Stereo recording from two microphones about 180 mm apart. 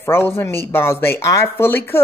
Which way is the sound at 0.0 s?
10° left (ahead or behind).